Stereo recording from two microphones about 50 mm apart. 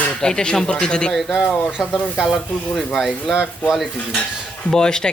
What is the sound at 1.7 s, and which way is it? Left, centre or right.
Speech, centre.